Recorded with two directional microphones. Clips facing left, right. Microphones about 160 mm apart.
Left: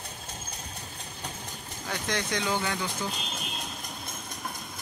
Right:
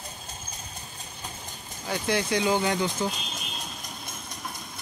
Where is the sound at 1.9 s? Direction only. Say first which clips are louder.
Right 5 dB; 10° right (ahead or behind).